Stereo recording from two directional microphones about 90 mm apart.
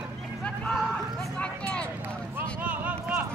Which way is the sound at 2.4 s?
20° right (ahead or behind).